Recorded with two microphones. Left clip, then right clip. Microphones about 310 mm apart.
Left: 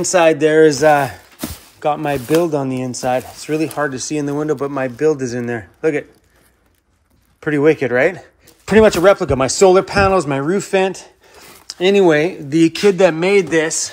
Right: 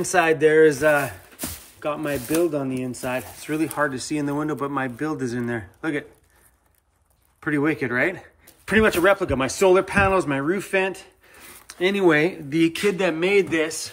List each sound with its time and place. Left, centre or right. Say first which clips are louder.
0.0 s speech: left 6 dB; centre
7.3 s speech: left 9 dB; centre